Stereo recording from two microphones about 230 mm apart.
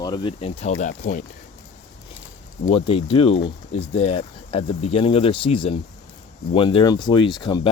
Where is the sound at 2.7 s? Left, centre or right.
Left.